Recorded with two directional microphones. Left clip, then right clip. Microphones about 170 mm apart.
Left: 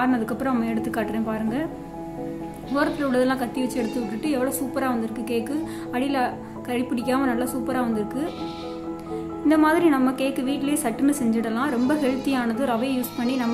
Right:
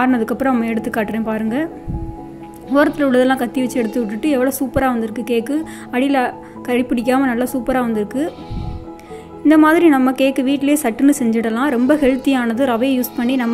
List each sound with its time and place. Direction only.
0.0 s a woman's voice: 30° right (ahead or behind)
2.7 s a woman's voice: 30° right (ahead or behind)
9.5 s a woman's voice: 30° right (ahead or behind)